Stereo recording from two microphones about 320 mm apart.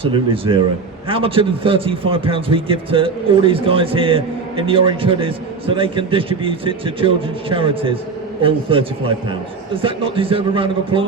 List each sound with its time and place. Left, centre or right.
0.0 s a man's voice: centre